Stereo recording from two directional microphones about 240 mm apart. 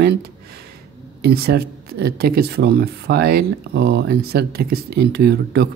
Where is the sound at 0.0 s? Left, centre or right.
Right.